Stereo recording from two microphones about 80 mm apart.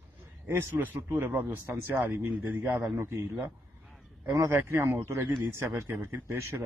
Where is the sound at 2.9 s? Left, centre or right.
Right.